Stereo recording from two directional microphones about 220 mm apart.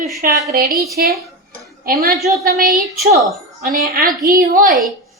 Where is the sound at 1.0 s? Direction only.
45° right (ahead or behind).